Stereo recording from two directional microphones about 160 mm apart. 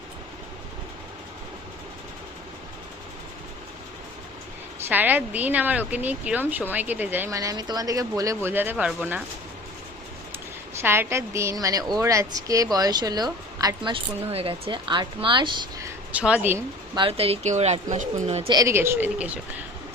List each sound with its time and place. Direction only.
4.9 s speech: 10° right (ahead or behind)
10.3 s a woman's voice: 15° right (ahead or behind)
16.1 s speech: 10° right (ahead or behind)
16.9 s speech: 35° right (ahead or behind)
18.5 s speech: 20° right (ahead or behind)